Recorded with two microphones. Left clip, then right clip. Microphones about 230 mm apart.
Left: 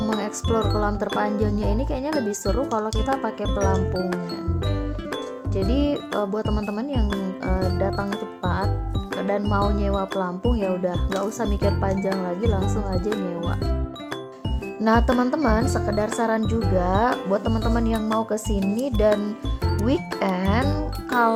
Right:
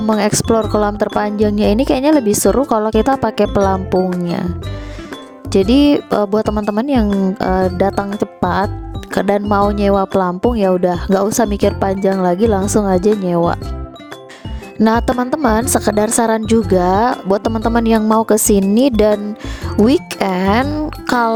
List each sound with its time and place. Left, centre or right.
0.2 s speech: right
5.5 s speech: right
14.8 s speech: right